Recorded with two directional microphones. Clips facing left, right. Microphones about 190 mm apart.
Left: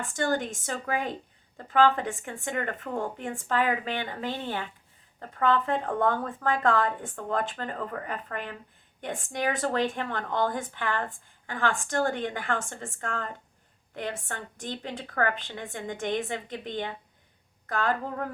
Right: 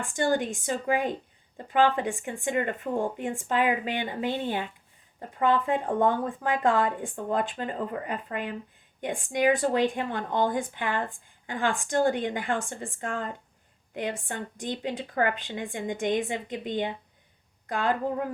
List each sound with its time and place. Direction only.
0.2 s a woman's voice: 15° right (ahead or behind)